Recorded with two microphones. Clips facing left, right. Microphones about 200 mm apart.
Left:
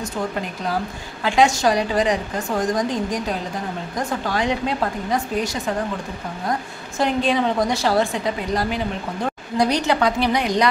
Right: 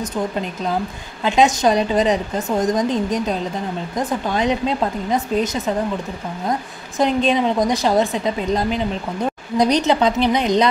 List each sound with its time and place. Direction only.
1.2 s a woman's voice: 20° right (ahead or behind)
7.0 s a woman's voice: 20° right (ahead or behind)